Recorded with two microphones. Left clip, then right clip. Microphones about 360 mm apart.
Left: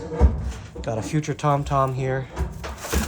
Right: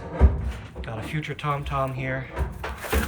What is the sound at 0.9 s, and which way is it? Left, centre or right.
Speech, centre.